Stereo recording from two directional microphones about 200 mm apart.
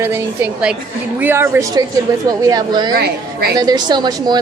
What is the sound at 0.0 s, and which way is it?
A woman's voice, 10° right (ahead or behind).